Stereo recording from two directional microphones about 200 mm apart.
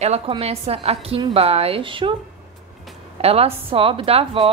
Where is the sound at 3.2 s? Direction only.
30° right (ahead or behind).